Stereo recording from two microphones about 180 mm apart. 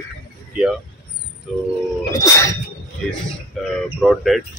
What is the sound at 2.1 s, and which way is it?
Sneeze, 20° left (ahead or behind).